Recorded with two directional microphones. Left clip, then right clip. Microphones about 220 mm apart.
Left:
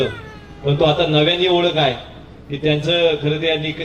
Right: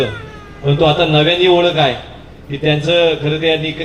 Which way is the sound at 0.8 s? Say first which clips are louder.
Right 3 dB; 30° left (ahead or behind).